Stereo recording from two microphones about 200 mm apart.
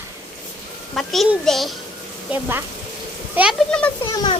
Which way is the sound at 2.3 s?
10° right (ahead or behind).